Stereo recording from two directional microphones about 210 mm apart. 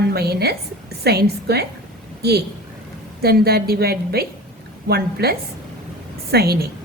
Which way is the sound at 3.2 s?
45° right (ahead or behind).